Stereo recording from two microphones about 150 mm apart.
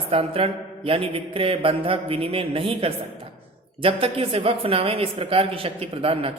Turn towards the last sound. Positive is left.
turn(degrees=-40)  # may be behind; listen again after turning